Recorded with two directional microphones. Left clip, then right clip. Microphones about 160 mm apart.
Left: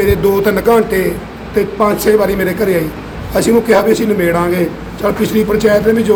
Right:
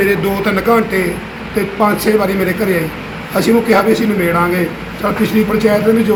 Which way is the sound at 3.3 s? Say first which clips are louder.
Left 1 dB; 40° left (ahead or behind).